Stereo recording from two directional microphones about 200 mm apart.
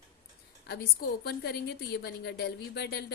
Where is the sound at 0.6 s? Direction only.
55° left (ahead or behind).